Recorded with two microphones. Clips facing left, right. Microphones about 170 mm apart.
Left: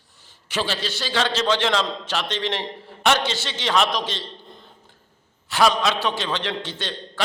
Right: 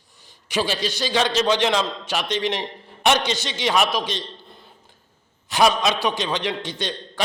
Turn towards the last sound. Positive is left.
turn(degrees=-15)  # may be behind; listen again after turning